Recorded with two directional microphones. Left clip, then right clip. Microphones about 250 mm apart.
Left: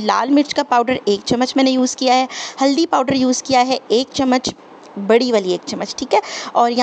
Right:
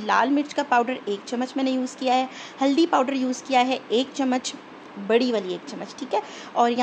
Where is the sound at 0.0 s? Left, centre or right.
Left.